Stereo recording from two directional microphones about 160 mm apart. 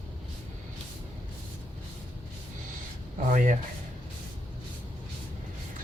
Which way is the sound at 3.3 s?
55° right (ahead or behind).